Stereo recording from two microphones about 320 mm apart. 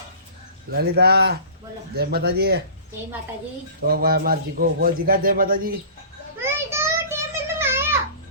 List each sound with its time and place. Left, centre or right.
0.7 s a man's voice: right
3.8 s a man's voice: right
6.4 s a sound: centre